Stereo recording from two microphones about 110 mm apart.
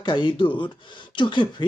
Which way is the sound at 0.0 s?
45° left (ahead or behind).